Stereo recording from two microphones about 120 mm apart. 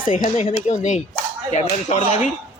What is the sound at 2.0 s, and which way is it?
Speech, 55° left (ahead or behind).